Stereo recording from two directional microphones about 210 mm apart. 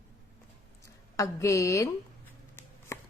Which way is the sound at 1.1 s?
15° left (ahead or behind).